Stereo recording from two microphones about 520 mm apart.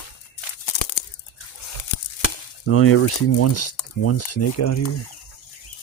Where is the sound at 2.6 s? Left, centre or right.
Left.